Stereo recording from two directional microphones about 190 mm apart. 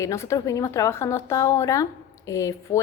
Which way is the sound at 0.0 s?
15° left (ahead or behind).